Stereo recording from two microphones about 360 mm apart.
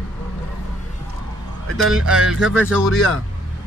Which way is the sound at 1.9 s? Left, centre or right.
Right.